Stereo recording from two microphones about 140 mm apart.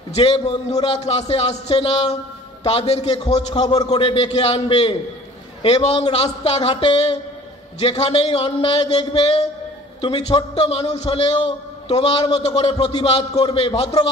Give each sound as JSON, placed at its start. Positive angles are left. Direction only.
{"t": 0.1, "sound": "a man's voice", "side_deg": 40}
{"t": 3.5, "sound": "a man's voice", "side_deg": 30}